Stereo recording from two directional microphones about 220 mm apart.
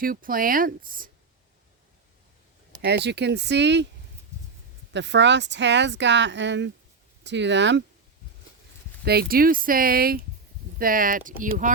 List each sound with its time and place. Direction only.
0.0 s speech: 40° right (ahead or behind)
2.8 s speech: 50° right (ahead or behind)
4.9 s speech: 55° right (ahead or behind)
9.0 s speech: 45° right (ahead or behind)